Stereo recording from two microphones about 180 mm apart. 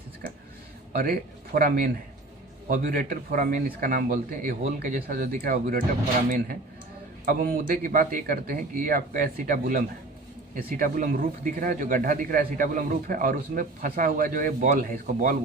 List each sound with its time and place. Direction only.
0.9 s a man's voice: 55° right (ahead or behind)
7.3 s a man's voice: 50° right (ahead or behind)